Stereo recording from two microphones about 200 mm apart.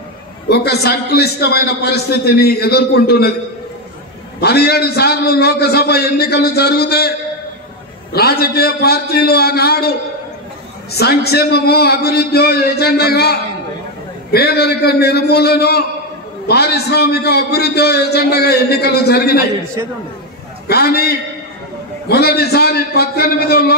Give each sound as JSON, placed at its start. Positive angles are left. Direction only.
{"t": 0.5, "sound": "a man's voice", "side_deg": 55}
{"t": 4.4, "sound": "a man's voice", "side_deg": 55}
{"t": 20.6, "sound": "a man's voice", "side_deg": 50}